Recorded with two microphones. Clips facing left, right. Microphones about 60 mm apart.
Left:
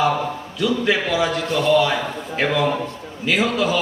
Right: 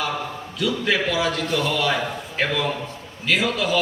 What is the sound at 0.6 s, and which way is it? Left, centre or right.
Speech, centre.